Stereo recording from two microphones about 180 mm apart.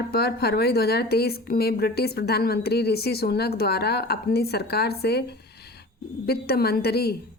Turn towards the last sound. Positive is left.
turn(degrees=60)  # may be behind; listen again after turning